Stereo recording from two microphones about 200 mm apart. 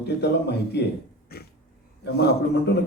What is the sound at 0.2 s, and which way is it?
Speech, 55° left (ahead or behind).